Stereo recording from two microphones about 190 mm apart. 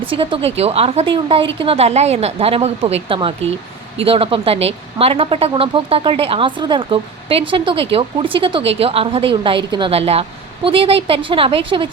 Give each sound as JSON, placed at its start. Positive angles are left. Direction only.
{"t": 0.0, "sound": "a woman's voice", "side_deg": -30}